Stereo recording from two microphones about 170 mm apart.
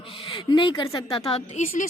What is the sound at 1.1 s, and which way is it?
Speech, 35° left (ahead or behind).